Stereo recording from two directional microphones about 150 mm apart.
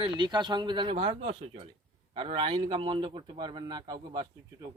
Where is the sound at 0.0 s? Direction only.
30° right (ahead or behind).